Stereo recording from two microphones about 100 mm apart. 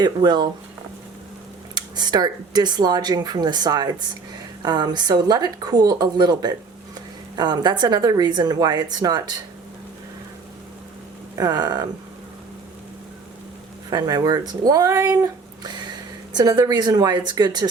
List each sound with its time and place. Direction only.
0.0 s speech: 45° right (ahead or behind)
1.7 s speech: 45° right (ahead or behind)
11.3 s speech: 40° right (ahead or behind)
13.9 s speech: 40° right (ahead or behind)